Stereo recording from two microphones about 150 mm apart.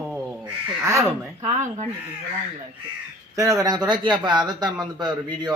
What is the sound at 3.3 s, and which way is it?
A man's voice, 20° right (ahead or behind).